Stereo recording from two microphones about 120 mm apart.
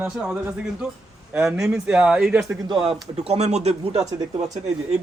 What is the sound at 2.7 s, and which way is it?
Speech, 50° right (ahead or behind).